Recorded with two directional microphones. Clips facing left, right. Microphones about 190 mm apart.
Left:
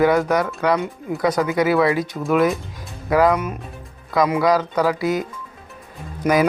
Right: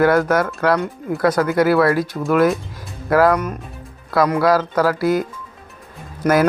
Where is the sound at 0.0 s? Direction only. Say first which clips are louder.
Right 2 dB; centre (ahead or behind).